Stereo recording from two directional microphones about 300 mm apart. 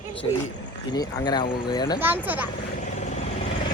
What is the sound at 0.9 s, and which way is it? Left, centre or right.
Speech, centre.